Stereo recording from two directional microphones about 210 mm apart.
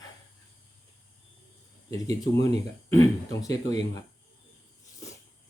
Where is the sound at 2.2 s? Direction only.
20° left (ahead or behind).